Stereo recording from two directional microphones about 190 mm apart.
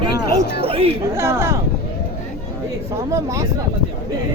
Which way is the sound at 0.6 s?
30° right (ahead or behind).